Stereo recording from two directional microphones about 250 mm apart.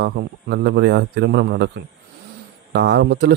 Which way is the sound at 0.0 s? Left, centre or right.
Right.